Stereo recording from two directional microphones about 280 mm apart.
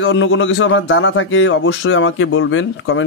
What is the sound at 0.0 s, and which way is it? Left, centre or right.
A man's voice, left.